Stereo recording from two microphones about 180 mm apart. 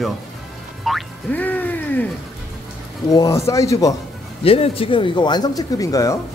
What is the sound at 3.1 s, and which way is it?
Speech, 20° left (ahead or behind).